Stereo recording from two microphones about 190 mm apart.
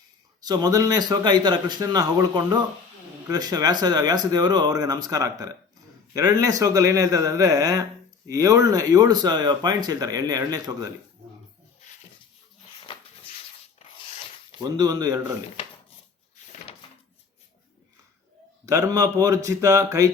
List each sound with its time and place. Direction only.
0.4 s speech: 20° right (ahead or behind)
12.8 s a sound: 25° left (ahead or behind)
14.6 s speech: 20° right (ahead or behind)
18.6 s speech: 20° right (ahead or behind)